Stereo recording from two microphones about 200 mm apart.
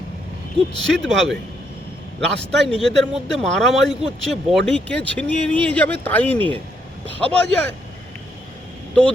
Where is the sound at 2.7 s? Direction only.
5° left (ahead or behind).